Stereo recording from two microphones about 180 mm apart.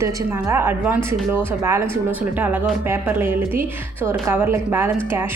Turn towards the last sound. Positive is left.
turn(degrees=-15)  # may be behind; listen again after turning